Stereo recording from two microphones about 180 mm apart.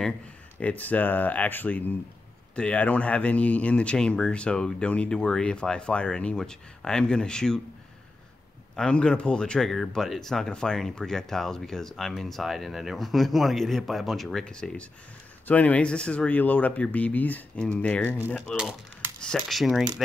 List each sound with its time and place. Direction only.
0.6 s speech: 10° left (ahead or behind)
8.7 s speech: 5° left (ahead or behind)